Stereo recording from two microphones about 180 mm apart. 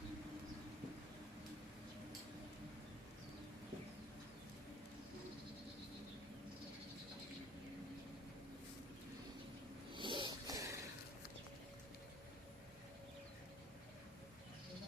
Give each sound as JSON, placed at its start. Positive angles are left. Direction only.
{"t": 9.9, "sound": "snort", "side_deg": -25}